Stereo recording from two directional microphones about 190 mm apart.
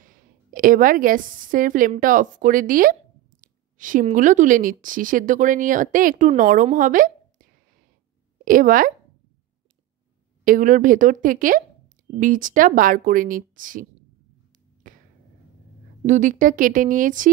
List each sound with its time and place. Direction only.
0.0 s a woman's voice: 45° right (ahead or behind)
10.4 s speech: 45° right (ahead or behind)
14.8 s finger snapping: 45° right (ahead or behind)
16.0 s speech: 40° right (ahead or behind)